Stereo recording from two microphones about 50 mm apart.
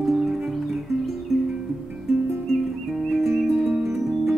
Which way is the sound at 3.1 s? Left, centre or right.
Centre.